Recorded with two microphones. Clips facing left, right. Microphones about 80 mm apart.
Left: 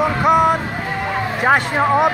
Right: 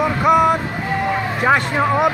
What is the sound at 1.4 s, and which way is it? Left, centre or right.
Speech, left.